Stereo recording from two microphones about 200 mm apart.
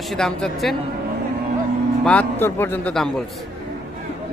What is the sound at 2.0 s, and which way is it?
A man's voice, 10° left (ahead or behind).